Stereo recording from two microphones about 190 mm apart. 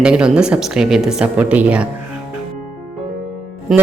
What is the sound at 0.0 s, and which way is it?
Speech, 5° right (ahead or behind).